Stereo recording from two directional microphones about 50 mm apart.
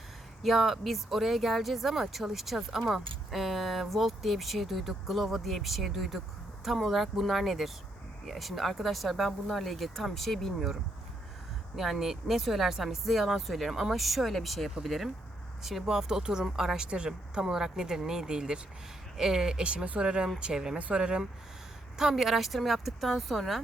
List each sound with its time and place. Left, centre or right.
0.4 s speech: centre
11.8 s speech: centre
20.7 s speech: right
21.9 s speech: centre